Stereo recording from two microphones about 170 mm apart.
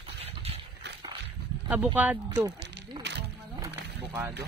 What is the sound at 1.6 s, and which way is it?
Speech, 10° right (ahead or behind).